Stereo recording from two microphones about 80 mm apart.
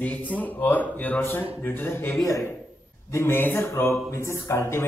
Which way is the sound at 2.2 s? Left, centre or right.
Left.